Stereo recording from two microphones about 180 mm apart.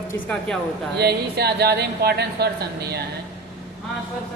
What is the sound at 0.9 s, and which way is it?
Speech, 65° right (ahead or behind).